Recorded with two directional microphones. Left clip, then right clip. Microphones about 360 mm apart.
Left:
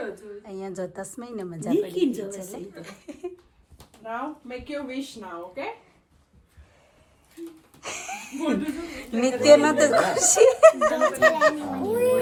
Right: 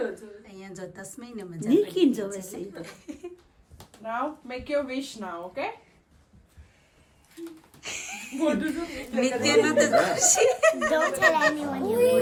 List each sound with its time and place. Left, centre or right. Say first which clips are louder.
0.4 s speech: left 11 dB; centre
7.8 s a sound: left 2 dB; centre
8.4 s speech: right 1 dB; centre